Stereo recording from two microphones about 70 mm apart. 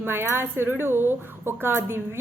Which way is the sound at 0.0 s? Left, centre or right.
Right.